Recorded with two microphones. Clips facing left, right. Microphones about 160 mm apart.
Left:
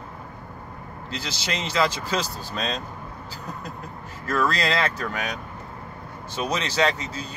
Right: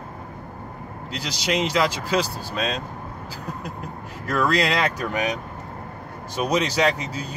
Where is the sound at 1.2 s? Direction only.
10° right (ahead or behind).